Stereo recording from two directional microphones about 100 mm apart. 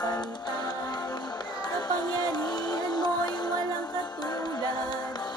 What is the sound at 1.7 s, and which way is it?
Music, 45° left (ahead or behind).